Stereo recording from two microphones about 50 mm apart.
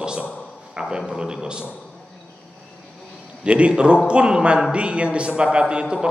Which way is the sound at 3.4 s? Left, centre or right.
Right.